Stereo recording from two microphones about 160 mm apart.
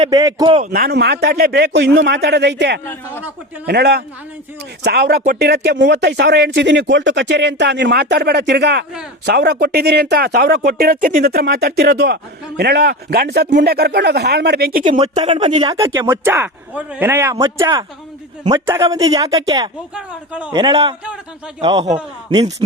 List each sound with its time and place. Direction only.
0.1 s speech: 25° right (ahead or behind)
0.5 s speech: 55° right (ahead or behind); by 5.2 s 85° right
5.2 s speech: 70° right (ahead or behind)
14.9 s speech: 40° right (ahead or behind)
15.6 s speech: 20° right (ahead or behind)
19.9 s speech: 5° right (ahead or behind)
20.5 s speech: 25° right (ahead or behind)